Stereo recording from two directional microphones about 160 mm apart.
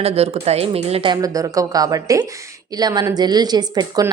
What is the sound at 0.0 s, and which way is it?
Speech, 40° right (ahead or behind).